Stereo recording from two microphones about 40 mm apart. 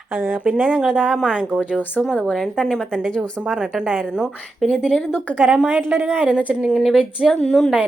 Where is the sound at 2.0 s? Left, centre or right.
Centre.